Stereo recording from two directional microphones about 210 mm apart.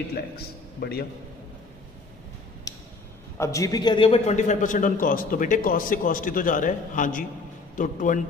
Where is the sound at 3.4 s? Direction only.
15° left (ahead or behind); by 8.2 s 40° left (ahead or behind).